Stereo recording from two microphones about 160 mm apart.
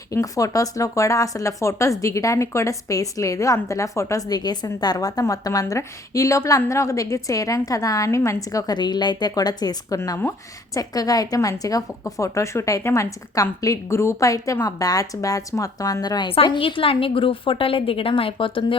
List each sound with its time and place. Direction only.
0.1 s speech: 20° left (ahead or behind)